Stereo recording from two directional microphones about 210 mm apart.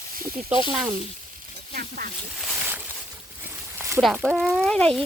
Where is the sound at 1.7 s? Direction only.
45° right (ahead or behind).